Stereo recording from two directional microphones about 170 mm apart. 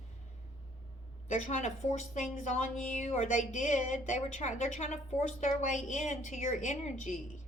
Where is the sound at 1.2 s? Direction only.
45° left (ahead or behind).